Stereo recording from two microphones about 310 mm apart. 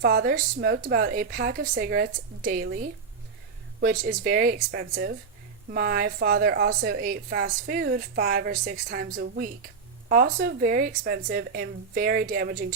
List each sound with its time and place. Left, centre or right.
0.0 s a woman's voice: right